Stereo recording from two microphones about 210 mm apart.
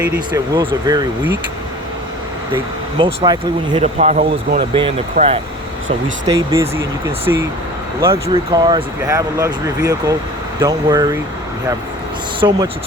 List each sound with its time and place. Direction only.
0.3 s speech: 20° right (ahead or behind)
3.0 s speech: 20° right (ahead or behind)
3.9 s speech: 35° right (ahead or behind)
4.7 s speech: 25° right (ahead or behind)
6.2 s speech: 15° right (ahead or behind)
12.4 s speech: 25° right (ahead or behind)